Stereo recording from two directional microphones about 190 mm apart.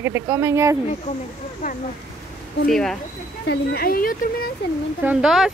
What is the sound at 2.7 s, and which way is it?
Speech, centre (ahead or behind).